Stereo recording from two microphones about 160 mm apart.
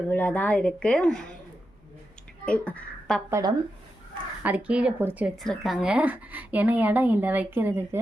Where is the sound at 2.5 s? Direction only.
10° left (ahead or behind).